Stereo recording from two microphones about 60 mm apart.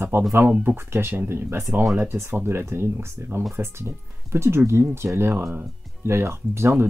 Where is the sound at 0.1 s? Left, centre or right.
Right.